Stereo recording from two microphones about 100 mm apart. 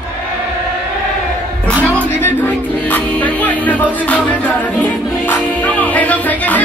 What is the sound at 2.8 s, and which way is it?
Music, 15° left (ahead or behind).